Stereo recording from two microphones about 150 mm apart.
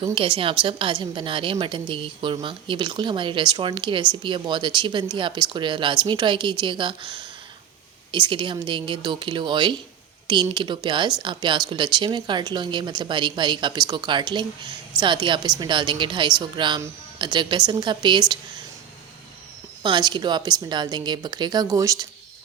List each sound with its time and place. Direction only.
0.0 s a woman's voice: 35° right (ahead or behind)
19.8 s speech: 30° right (ahead or behind)